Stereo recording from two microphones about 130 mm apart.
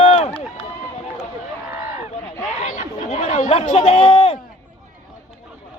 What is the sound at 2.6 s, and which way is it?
Chatter, 70° left (ahead or behind).